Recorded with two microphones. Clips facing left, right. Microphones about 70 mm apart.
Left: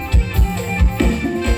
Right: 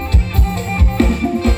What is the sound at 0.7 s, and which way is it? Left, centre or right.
Music, right.